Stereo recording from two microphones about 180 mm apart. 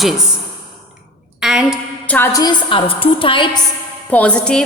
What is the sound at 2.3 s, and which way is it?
A woman's voice, 20° left (ahead or behind).